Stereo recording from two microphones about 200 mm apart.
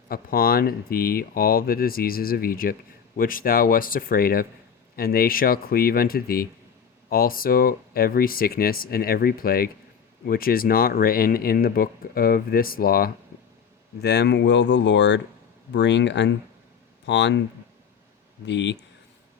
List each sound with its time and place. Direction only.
0.1 s speech: 50° left (ahead or behind)
18.4 s speech: 65° left (ahead or behind)